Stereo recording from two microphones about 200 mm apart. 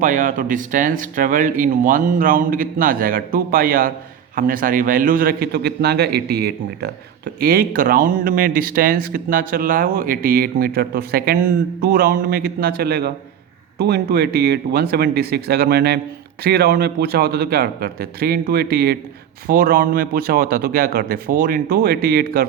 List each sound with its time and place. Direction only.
0.0 s speech: 40° right (ahead or behind)